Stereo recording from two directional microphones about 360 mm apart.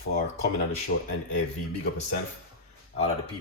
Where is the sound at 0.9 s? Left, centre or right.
Left.